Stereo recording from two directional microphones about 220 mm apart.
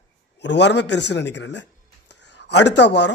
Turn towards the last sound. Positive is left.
turn(degrees=50)  # may be behind; listen again after turning